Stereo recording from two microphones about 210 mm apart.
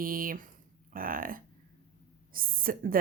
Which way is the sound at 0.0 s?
40° right (ahead or behind).